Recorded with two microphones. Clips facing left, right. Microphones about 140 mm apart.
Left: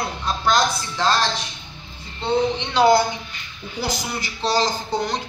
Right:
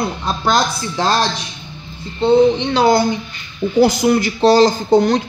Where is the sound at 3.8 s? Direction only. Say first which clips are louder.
Right 14 dB; 50° right (ahead or behind).